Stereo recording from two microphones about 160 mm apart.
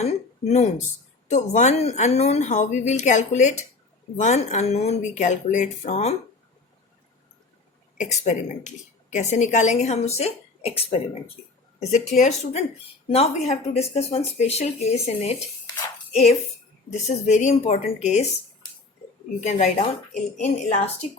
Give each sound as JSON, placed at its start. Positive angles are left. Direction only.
{"t": 0.0, "sound": "a woman's voice", "side_deg": 45}
{"t": 7.9, "sound": "a woman's voice", "side_deg": 45}
{"t": 16.9, "sound": "a woman's voice", "side_deg": 45}
{"t": 19.4, "sound": "a woman's voice", "side_deg": 45}